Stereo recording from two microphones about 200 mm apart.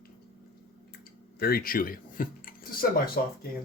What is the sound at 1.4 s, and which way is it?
Speech, 50° left (ahead or behind).